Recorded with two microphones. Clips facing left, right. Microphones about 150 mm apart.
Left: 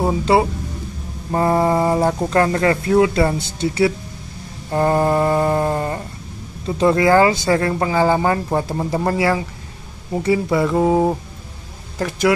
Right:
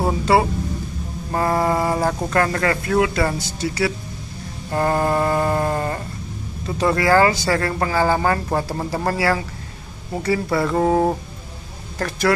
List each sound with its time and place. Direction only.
0.2 s speech: 25° left (ahead or behind)
1.3 s mantra: 20° left (ahead or behind)
2.2 s speech: 20° left (ahead or behind)
4.6 s a sound: 20° left (ahead or behind)
6.8 s speech: 20° left (ahead or behind)
10.2 s a sound: 20° left (ahead or behind)